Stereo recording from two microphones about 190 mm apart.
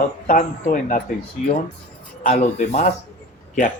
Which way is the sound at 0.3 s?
45° left (ahead or behind).